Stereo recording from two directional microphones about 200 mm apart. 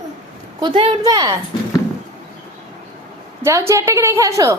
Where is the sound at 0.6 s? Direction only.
25° right (ahead or behind).